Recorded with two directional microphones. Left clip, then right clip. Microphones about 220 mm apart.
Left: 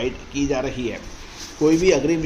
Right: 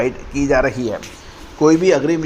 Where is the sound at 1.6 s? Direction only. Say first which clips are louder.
Right 4 dB; 20° right (ahead or behind).